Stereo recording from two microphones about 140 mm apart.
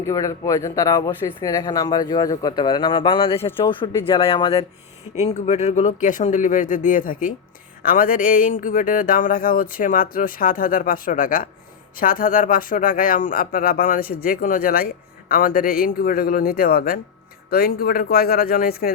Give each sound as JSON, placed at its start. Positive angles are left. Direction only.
{"t": 0.0, "sound": "speech", "side_deg": 25}
{"t": 5.1, "sound": "speech", "side_deg": 55}
{"t": 7.8, "sound": "speech", "side_deg": 90}
{"t": 11.9, "sound": "speech", "side_deg": 85}